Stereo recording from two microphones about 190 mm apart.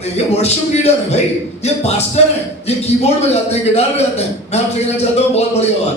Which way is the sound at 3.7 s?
35° left (ahead or behind).